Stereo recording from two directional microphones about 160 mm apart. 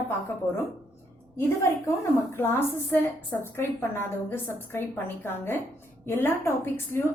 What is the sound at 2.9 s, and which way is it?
A woman's voice, 15° left (ahead or behind).